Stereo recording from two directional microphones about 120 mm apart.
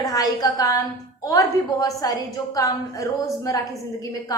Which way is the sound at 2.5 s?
30° left (ahead or behind).